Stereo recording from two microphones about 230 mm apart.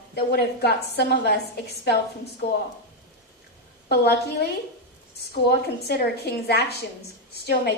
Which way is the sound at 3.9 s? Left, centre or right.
Left.